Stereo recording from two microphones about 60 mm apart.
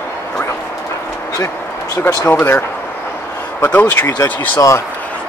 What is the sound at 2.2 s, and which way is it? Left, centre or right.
Speech, left.